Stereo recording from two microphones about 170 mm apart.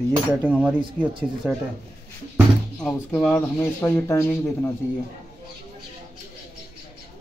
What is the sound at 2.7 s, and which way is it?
Speech, 5° left (ahead or behind).